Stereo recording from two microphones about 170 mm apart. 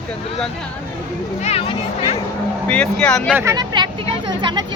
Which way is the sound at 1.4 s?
35° left (ahead or behind).